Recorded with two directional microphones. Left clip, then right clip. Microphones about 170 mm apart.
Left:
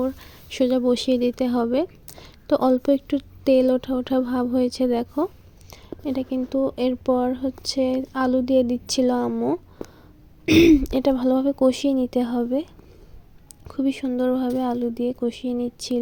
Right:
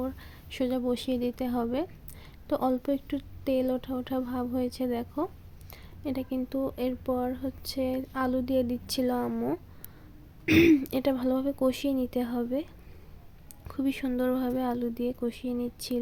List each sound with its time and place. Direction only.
0.0 s speech: 35° left (ahead or behind)
5.7 s speech: 25° left (ahead or behind)
13.7 s speech: 20° left (ahead or behind)